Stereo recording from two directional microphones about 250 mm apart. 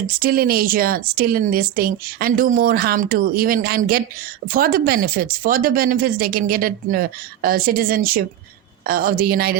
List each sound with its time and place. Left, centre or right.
0.2 s speech: right